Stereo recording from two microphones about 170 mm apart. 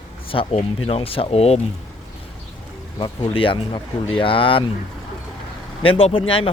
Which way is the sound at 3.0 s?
30° left (ahead or behind).